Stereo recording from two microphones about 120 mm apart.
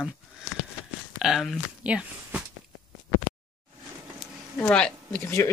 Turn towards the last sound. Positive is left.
turn(degrees=25)  # may be behind; listen again after turning